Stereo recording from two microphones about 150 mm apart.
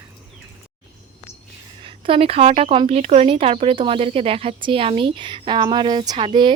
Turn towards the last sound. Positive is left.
turn(degrees=-35)  # may be behind; listen again after turning